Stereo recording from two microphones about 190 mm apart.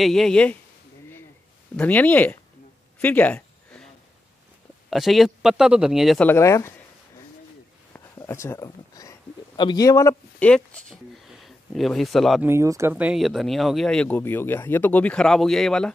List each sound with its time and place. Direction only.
0.0 s speech: centre (ahead or behind)
1.8 s speech: 10° left (ahead or behind)
3.0 s a sound: 10° left (ahead or behind)
4.8 s speech: centre (ahead or behind)
6.2 s speech: 15° left (ahead or behind)
7.9 s a sound: 15° left (ahead or behind)
9.6 s a man's voice: 20° left (ahead or behind)
10.4 s speech: 5° left (ahead or behind)
12.4 s speech: 15° right (ahead or behind); by 15.9 s 5° left (ahead or behind)